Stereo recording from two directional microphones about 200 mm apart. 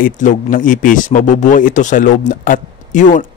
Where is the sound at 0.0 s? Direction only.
40° left (ahead or behind).